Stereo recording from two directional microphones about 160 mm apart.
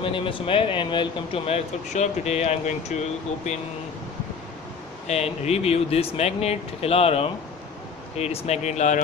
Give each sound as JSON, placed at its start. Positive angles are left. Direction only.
{"t": 0.0, "sound": "speech", "side_deg": 30}
{"t": 5.0, "sound": "speech", "side_deg": 40}